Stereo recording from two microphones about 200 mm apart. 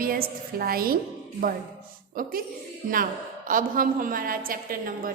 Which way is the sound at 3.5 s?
45° right (ahead or behind).